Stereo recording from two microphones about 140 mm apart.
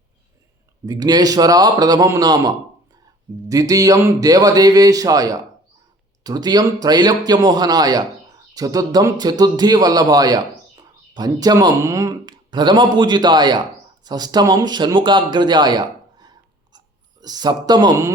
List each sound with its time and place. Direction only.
0.9 s speech: 30° right (ahead or behind)